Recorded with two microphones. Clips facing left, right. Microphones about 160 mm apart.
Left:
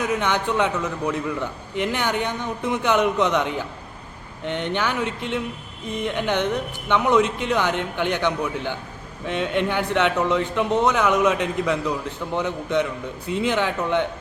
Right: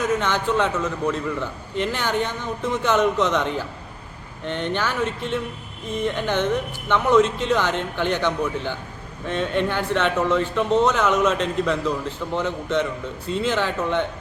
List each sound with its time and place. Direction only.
0.2 s a man's voice: 15° left (ahead or behind)